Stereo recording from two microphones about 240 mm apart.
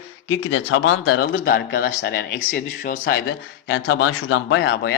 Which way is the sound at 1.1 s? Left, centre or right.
Left.